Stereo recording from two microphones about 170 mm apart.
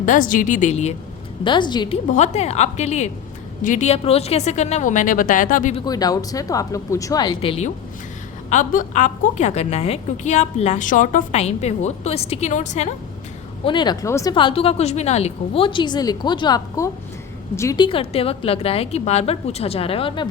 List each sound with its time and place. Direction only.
0.0 s a woman's voice: 50° left (ahead or behind)
1.5 s a woman's voice: 25° left (ahead or behind)
2.0 s a woman's voice: 45° left (ahead or behind)
5.8 s a woman's voice: 20° left (ahead or behind)
8.4 s a woman's voice: 50° left (ahead or behind)
13.7 s a woman's voice: 25° left (ahead or behind)
14.3 s a woman's voice: 30° left (ahead or behind)
17.8 s a woman's voice: 35° left (ahead or behind)